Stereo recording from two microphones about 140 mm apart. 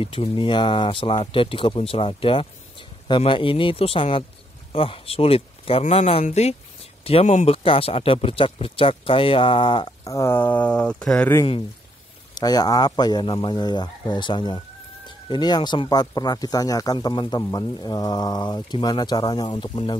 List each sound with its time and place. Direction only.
0.0 s speech: 40° left (ahead or behind); by 7.5 s 60° left (ahead or behind)
7.5 s speech: 40° left (ahead or behind)
10.0 s speech: 20° left (ahead or behind)
12.4 s speech: 30° left (ahead or behind)